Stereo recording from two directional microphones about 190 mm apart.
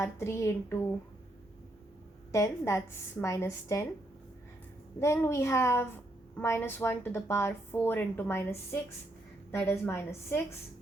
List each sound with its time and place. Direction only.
0.0 s speech: 15° left (ahead or behind)
2.3 s speech: 15° left (ahead or behind)
4.9 s speech: 15° left (ahead or behind)